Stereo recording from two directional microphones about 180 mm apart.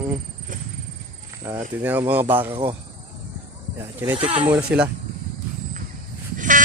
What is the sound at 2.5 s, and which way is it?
Speech, 30° right (ahead or behind).